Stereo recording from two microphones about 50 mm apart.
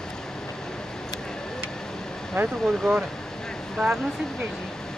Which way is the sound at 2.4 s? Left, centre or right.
Right.